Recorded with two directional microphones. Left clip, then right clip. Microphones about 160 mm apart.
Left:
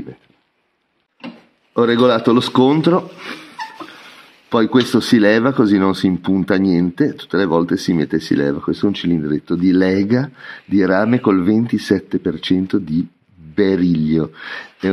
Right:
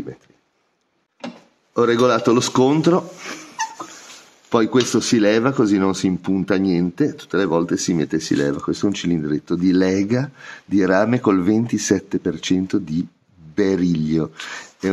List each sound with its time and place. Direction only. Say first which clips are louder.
1.7 s speech: left 2 dB; 30° left (ahead or behind)
4.5 s speech: left 2 dB; 30° left (ahead or behind)